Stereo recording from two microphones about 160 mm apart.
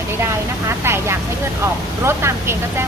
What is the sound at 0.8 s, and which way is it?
Speech, 15° right (ahead or behind).